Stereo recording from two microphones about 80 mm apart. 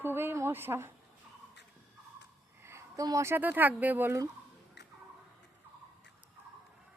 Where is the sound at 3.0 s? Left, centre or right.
Right.